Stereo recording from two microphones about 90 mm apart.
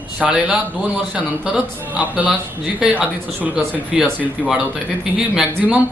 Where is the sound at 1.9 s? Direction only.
15° right (ahead or behind).